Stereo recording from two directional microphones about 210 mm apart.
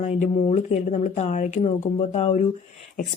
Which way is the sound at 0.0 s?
30° left (ahead or behind).